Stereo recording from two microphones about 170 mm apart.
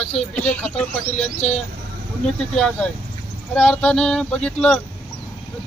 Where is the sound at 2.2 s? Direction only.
5° left (ahead or behind).